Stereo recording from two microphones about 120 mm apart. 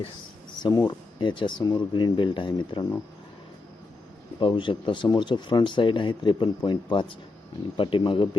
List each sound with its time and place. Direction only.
0.6 s speech: 35° left (ahead or behind)
4.4 s speech: 40° left (ahead or behind)